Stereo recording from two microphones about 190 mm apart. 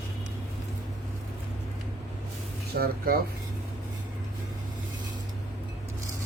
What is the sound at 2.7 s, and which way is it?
Speech, 55° right (ahead or behind).